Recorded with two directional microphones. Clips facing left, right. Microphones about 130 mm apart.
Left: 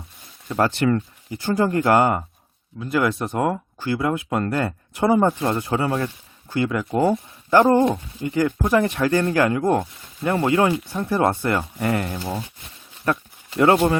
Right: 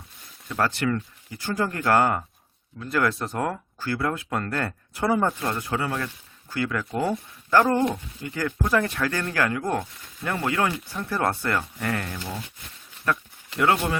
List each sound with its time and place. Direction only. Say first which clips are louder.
0.4 s speech: left 5 dB; 25° left (ahead or behind)
13.1 s speech: left 3 dB; 35° left (ahead or behind)